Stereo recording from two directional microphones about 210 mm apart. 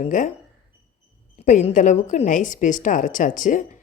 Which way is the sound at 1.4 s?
35° left (ahead or behind).